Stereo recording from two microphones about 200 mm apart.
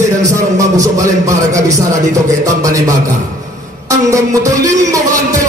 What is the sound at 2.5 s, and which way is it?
Speech, 15° right (ahead or behind).